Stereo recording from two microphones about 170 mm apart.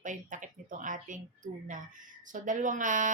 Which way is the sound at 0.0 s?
50° right (ahead or behind).